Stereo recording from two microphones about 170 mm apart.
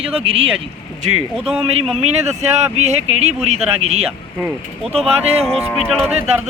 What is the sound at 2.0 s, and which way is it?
Speech, 40° right (ahead or behind).